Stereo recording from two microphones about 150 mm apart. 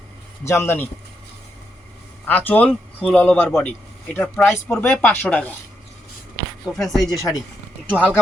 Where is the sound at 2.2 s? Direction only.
10° left (ahead or behind).